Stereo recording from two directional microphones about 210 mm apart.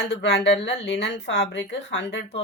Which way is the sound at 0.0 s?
55° left (ahead or behind).